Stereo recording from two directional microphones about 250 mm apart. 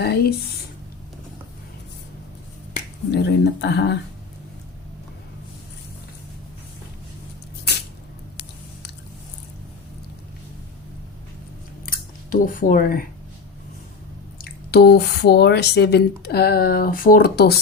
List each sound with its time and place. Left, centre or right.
0.0 s speech: left
3.1 s speech: left
11.9 s scissors: left
14.3 s speech: left